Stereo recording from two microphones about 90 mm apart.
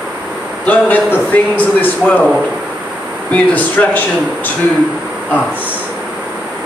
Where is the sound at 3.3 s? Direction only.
15° left (ahead or behind).